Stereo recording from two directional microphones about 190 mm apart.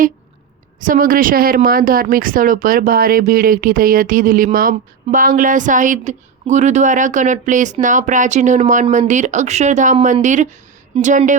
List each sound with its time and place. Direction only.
0.8 s a woman's voice: 45° right (ahead or behind)